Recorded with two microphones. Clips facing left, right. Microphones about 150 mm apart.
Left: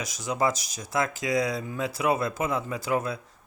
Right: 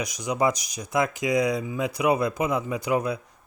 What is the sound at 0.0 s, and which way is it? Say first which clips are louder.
Speech: right 3 dB; 15° right (ahead or behind).